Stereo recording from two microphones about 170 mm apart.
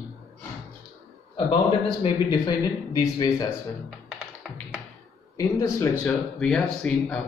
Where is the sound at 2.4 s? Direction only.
20° left (ahead or behind).